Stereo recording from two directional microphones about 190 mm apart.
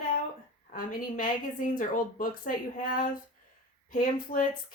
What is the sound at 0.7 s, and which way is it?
Speech, 45° left (ahead or behind).